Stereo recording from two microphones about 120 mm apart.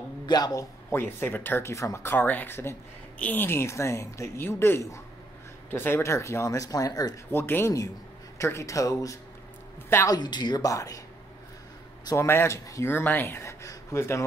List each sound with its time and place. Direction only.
0.3 s speech: 30° left (ahead or behind)
0.9 s speech: 15° left (ahead or behind)
7.2 s speech: 15° left (ahead or behind)
10.1 s speech: 35° left (ahead or behind)
12.1 s speech: 20° left (ahead or behind)